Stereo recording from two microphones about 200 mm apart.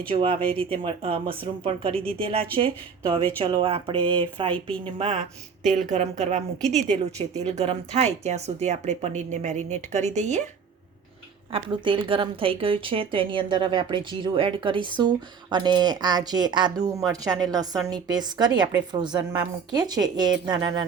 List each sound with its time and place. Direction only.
0.1 s a woman's voice: 25° right (ahead or behind)
6.6 s a woman's voice: centre (ahead or behind)
7.2 s a woman's voice: 25° right (ahead or behind)
11.5 s a woman's voice: 25° right (ahead or behind)